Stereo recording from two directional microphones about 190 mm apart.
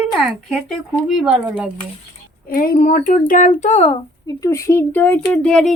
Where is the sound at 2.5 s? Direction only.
50° left (ahead or behind); by 4.3 s 30° left (ahead or behind).